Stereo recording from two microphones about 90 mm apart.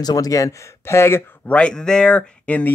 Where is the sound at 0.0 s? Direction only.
45° left (ahead or behind).